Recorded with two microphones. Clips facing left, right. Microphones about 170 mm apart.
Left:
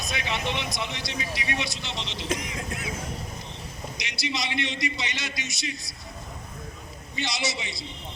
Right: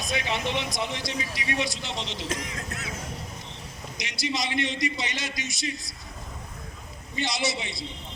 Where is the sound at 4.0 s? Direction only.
45° right (ahead or behind).